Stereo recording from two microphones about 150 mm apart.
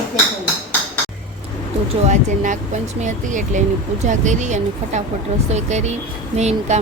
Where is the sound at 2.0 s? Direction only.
50° right (ahead or behind).